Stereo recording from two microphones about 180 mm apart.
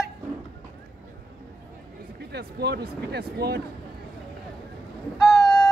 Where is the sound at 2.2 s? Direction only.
65° right (ahead or behind).